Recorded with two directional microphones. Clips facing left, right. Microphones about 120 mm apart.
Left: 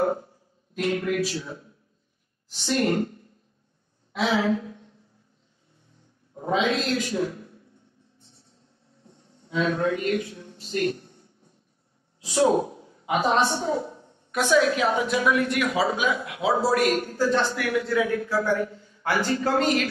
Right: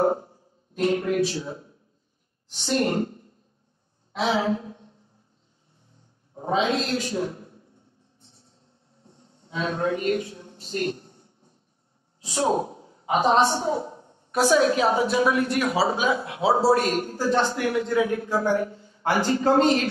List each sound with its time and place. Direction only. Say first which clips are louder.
0.0 s music: right 2 dB; 30° right (ahead or behind)
0.7 s a woman's voice: right 3 dB; 30° right (ahead or behind)
4.1 s a sound: even; 30° right (ahead or behind)
6.3 s a man's voice: even; 30° right (ahead or behind)
9.1 s a sound: left 5 dB; 30° right (ahead or behind)
12.2 s a woman's voice: left 3 dB; 30° right (ahead or behind)